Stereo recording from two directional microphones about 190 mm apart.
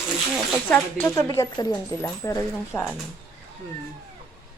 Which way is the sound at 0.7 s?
10° left (ahead or behind).